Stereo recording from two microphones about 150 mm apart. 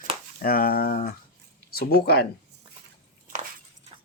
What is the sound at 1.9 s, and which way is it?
Speech, 90° left.